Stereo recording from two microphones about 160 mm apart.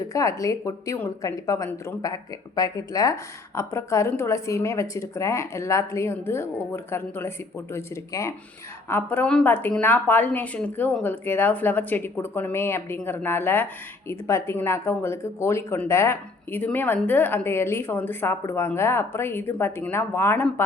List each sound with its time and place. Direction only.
0.1 s a woman's voice: 20° left (ahead or behind)